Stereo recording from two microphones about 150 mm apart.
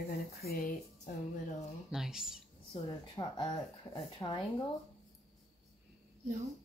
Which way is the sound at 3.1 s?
25° left (ahead or behind).